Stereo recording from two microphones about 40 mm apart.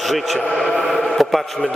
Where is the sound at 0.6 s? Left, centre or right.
Centre.